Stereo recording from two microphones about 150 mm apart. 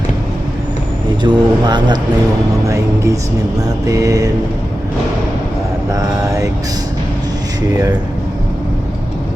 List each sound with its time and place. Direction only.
1.2 s speech: 30° right (ahead or behind)
5.9 s speech: 20° right (ahead or behind)